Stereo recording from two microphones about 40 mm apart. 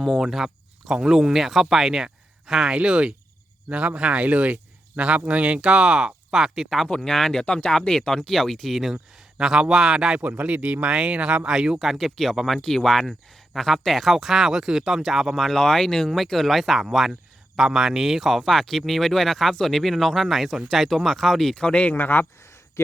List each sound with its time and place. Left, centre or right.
0.2 s speech: centre
6.3 s speech: centre
7.0 s speech: centre
7.4 s speech: left; by 9.0 s centre
9.4 s speech: centre
10.2 s speech: right
11.4 s speech: centre
11.8 s speech: centre
15.4 s speech: centre
18.5 s speech: centre
20.9 s speech: centre
21.6 s speech: left
21.9 s a man's voice: left